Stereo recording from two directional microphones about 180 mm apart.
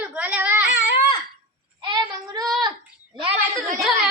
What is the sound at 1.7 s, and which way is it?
Child singing, 25° right (ahead or behind).